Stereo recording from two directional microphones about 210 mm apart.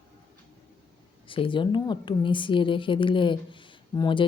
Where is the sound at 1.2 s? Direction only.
25° left (ahead or behind).